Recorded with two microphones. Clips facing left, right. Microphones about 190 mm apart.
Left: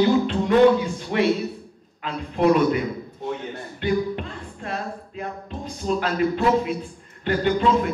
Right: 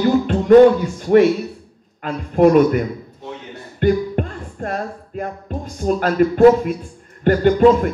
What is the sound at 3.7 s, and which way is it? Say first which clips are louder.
Speech: right 6 dB; 50° right (ahead or behind).